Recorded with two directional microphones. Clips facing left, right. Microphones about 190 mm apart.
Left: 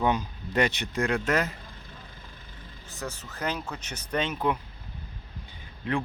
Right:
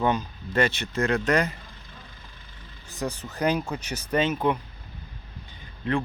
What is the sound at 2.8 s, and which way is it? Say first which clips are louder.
Speech: right 6 dB; 15° right (ahead or behind).